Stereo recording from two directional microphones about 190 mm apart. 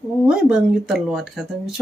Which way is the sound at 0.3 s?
5° right (ahead or behind).